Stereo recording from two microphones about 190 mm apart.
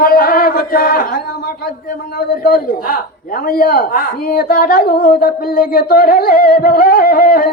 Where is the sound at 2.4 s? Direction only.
55° left (ahead or behind).